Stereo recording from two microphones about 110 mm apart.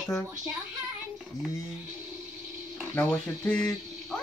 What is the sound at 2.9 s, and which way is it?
Speech, 20° left (ahead or behind).